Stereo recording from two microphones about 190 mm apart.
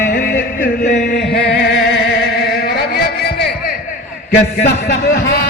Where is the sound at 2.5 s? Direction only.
55° left (ahead or behind).